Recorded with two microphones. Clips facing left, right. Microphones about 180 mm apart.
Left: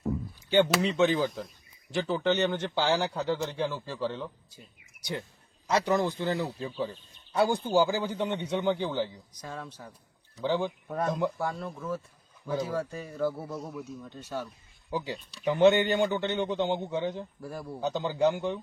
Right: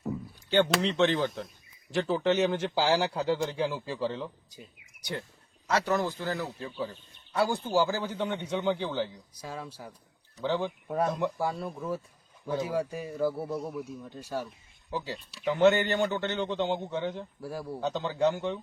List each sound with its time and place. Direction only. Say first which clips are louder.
0.5 s a man's voice: left 1 dB; 5° left (ahead or behind)
5.6 s a man's voice: left 2 dB; 15° left (ahead or behind)
9.0 s speech: right 1 dB; 5° right (ahead or behind)
10.3 s a man's voice: left 1 dB; 10° left (ahead or behind)
10.8 s speech: right 1 dB; 10° right (ahead or behind)
14.8 s speech: left 2 dB; 15° left (ahead or behind)
15.1 s speech: left 1 dB; 5° right (ahead or behind)
15.4 s a man's voice: left 1 dB; 15° left (ahead or behind)
17.4 s a man's voice: right 5 dB; 5° right (ahead or behind)
17.8 s a man's voice: left 1 dB; 10° left (ahead or behind)